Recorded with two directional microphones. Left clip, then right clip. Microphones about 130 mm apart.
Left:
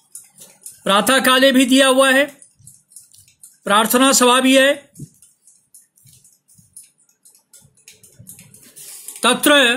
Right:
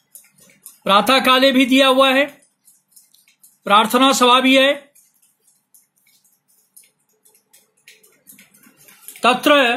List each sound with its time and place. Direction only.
0.8 s speech: 45° left (ahead or behind)
3.6 s speech: 40° left (ahead or behind)
9.2 s speech: 75° left (ahead or behind)